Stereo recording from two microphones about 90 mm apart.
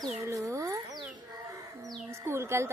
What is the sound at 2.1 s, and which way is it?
Speech, 30° right (ahead or behind).